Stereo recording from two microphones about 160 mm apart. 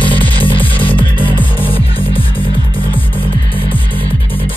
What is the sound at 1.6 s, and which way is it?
Music, 35° left (ahead or behind).